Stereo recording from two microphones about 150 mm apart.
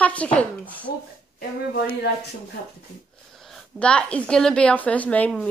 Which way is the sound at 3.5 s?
5° left (ahead or behind).